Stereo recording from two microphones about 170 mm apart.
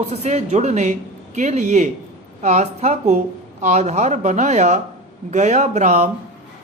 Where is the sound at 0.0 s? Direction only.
40° right (ahead or behind).